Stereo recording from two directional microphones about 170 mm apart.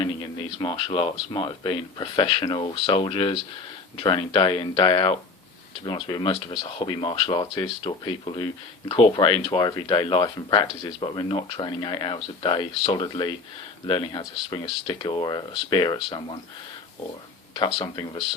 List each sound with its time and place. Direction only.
0.6 s speech: 30° left (ahead or behind)
17.7 s speech: 25° left (ahead or behind)